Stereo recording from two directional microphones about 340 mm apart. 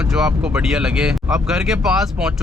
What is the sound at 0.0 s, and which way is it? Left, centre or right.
Speech, centre.